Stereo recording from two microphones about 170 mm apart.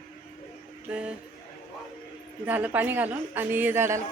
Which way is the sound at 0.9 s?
5° right (ahead or behind).